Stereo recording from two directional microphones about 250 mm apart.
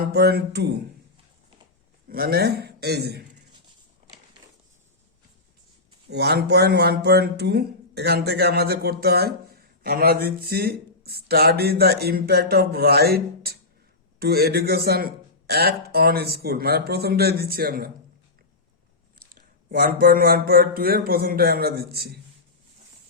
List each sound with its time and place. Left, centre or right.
0.0 s speech: right
2.0 s speech: right
6.1 s speech: right
19.3 s speech: right